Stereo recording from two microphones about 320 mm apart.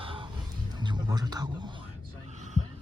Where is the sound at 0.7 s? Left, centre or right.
Centre.